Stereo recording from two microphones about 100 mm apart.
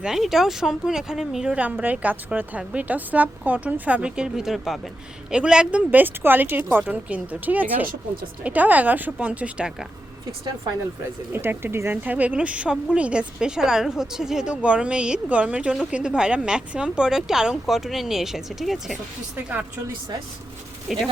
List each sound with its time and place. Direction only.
0.0 s a woman's voice: 5° right (ahead or behind)
11.3 s a woman's voice: 25° right (ahead or behind); by 18.9 s centre (ahead or behind)
20.8 s speech: centre (ahead or behind)